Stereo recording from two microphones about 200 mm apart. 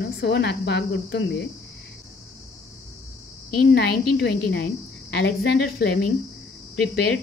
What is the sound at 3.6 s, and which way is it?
Speech, 55° left (ahead or behind).